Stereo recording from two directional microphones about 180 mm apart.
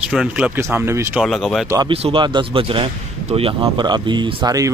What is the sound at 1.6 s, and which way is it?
Speech, 20° right (ahead or behind).